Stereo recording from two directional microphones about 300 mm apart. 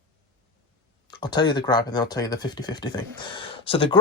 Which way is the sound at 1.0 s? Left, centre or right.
Centre.